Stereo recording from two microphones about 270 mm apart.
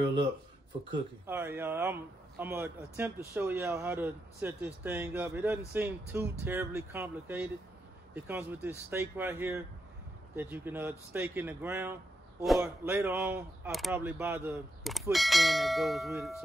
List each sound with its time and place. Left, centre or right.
1.2 s speech: centre